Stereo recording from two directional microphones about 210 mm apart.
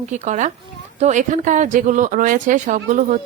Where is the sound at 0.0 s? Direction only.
35° right (ahead or behind).